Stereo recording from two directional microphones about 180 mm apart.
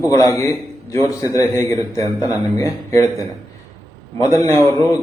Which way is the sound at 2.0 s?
20° right (ahead or behind).